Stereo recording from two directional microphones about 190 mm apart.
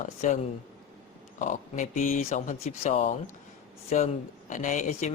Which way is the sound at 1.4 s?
40° left (ahead or behind).